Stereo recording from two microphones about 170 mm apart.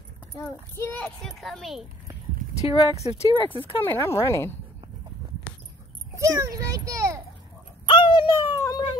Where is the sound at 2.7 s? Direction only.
35° left (ahead or behind).